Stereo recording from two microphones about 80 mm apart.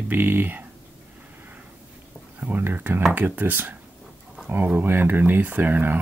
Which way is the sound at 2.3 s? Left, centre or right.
Right.